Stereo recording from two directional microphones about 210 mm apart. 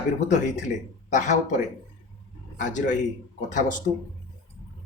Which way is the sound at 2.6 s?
35° left (ahead or behind).